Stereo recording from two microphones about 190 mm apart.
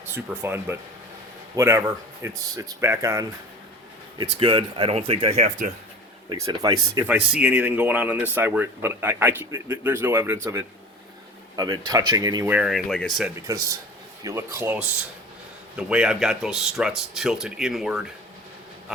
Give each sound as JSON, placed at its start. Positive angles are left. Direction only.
{"t": 0.0, "sound": "speech", "side_deg": -10}
{"t": 6.2, "sound": "speech", "side_deg": -20}
{"t": 12.5, "sound": "speech", "side_deg": -5}
{"t": 13.3, "sound": "speech", "side_deg": -15}